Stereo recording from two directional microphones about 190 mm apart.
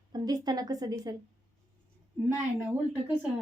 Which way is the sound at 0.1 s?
20° right (ahead or behind).